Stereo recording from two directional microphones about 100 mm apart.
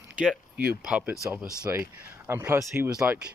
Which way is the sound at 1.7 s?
30° right (ahead or behind).